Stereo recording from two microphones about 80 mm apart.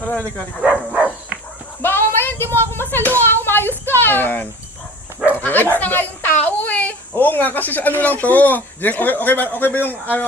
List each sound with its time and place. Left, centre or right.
0.6 s dog: centre
1.8 s a sound: left
2.7 s a woman's voice: left